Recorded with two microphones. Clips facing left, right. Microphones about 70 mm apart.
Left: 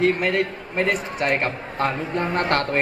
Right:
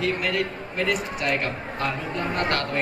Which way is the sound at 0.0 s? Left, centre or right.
Left.